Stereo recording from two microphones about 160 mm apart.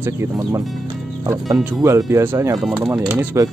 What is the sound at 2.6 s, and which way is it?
Speech, centre (ahead or behind).